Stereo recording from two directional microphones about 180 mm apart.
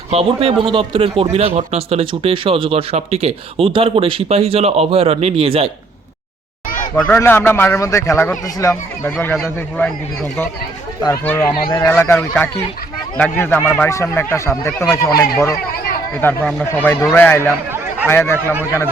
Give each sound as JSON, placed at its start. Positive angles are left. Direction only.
{"t": 0.1, "sound": "speech", "side_deg": -30}
{"t": 7.0, "sound": "speech", "side_deg": 10}
{"t": 16.2, "sound": "speech", "side_deg": 5}